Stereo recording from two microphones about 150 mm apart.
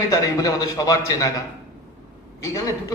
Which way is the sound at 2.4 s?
20° left (ahead or behind).